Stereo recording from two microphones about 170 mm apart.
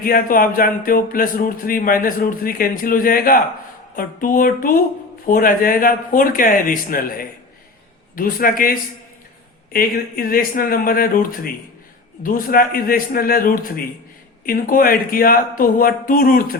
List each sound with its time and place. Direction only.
0.0 s speech: 55° left (ahead or behind)